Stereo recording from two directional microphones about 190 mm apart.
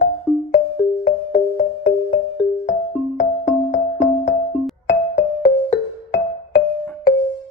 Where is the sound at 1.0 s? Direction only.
60° left (ahead or behind).